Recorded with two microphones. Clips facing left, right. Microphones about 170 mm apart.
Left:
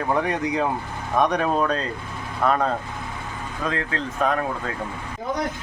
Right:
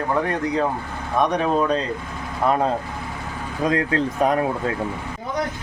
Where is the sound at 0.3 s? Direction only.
10° left (ahead or behind).